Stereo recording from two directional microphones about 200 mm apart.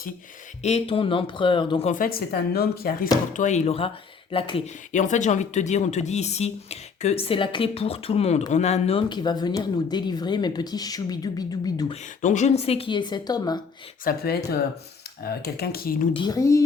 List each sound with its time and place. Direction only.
0.6 s speech: 30° left (ahead or behind)
1.9 s a woman's voice: 45° left (ahead or behind)
3.3 s speech: 35° left (ahead or behind); by 11.9 s 20° left (ahead or behind)
12.2 s speech: 35° left (ahead or behind); by 13.6 s 20° left (ahead or behind)
14.0 s a woman's voice: 50° left (ahead or behind)
16.1 s a woman's voice: 20° left (ahead or behind)